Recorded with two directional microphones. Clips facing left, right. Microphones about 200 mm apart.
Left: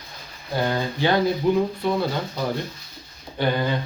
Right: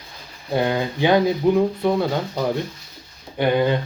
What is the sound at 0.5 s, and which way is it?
Speech, 15° right (ahead or behind).